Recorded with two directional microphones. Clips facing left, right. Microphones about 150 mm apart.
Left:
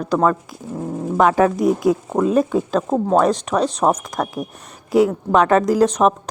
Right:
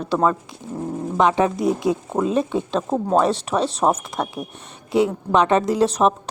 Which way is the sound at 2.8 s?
5° left (ahead or behind).